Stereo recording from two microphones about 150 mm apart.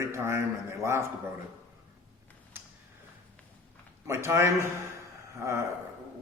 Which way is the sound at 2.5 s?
15° right (ahead or behind).